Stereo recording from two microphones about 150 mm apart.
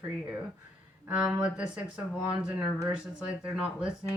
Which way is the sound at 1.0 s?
5° right (ahead or behind).